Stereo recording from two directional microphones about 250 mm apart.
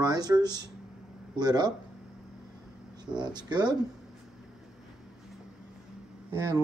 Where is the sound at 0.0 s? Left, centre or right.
Centre.